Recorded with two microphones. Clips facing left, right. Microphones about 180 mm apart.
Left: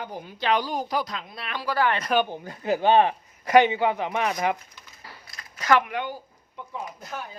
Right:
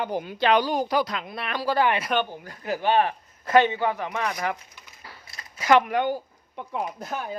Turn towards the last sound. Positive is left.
turn(degrees=-60)  # may be behind; listen again after turning